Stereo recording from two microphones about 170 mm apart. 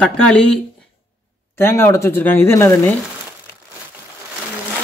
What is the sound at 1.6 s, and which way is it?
Speech, 15° left (ahead or behind).